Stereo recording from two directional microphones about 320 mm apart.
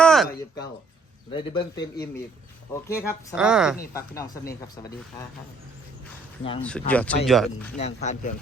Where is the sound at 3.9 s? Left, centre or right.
Centre.